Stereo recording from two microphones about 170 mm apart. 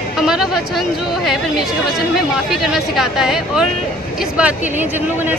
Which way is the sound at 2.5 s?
Centre (ahead or behind).